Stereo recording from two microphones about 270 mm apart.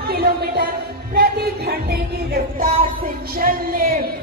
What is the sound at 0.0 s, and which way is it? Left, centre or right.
Music, right.